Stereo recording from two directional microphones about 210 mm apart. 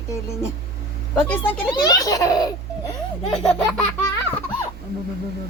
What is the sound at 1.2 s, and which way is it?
Baby laughter, 5° left (ahead or behind).